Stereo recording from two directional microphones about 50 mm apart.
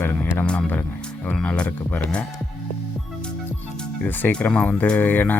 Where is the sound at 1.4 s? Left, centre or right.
Left.